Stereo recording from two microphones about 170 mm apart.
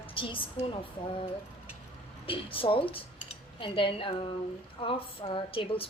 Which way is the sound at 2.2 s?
30° left (ahead or behind).